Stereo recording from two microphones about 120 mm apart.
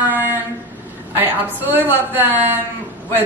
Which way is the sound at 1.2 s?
15° right (ahead or behind).